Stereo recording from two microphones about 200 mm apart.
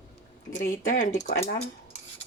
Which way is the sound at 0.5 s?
45° left (ahead or behind).